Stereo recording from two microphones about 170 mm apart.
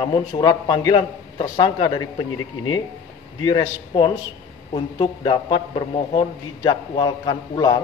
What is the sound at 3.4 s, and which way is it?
A man's voice, 25° left (ahead or behind).